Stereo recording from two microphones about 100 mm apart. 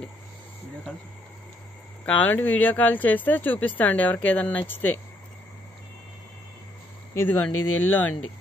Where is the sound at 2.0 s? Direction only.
15° left (ahead or behind).